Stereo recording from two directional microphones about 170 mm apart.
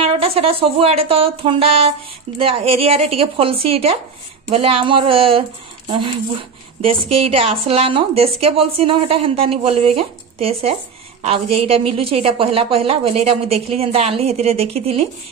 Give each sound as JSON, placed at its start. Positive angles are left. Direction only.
{"t": 0.0, "sound": "a woman's voice", "side_deg": -35}